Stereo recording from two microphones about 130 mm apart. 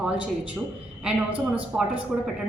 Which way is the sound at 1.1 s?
10° right (ahead or behind).